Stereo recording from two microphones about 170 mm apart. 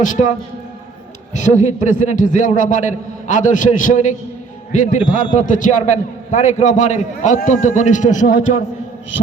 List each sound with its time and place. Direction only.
0.0 s a man's voice: 45° left (ahead or behind)
1.4 s a man's voice: 45° left (ahead or behind)